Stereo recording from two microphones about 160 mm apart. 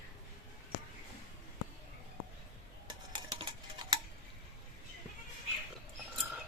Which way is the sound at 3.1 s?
30° right (ahead or behind).